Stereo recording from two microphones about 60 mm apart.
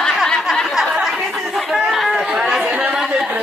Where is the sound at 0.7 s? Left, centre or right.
Centre.